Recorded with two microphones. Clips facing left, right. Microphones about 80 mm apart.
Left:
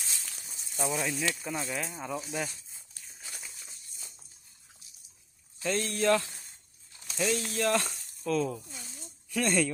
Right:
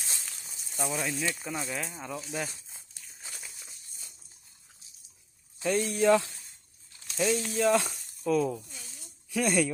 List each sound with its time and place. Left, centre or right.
0.9 s speech: centre
3.3 s a sound: centre
5.5 s speech: centre
7.2 s speech: centre